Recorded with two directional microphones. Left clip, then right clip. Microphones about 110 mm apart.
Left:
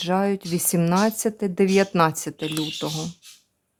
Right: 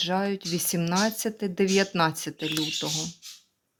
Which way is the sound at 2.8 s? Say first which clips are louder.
Left 1 dB; 30° left (ahead or behind).